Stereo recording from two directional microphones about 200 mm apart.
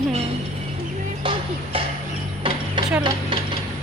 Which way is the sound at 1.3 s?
25° right (ahead or behind).